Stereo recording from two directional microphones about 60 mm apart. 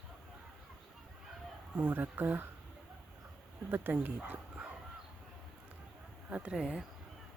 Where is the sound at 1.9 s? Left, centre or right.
Right.